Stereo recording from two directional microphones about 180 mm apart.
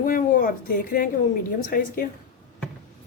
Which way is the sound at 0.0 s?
50° left (ahead or behind).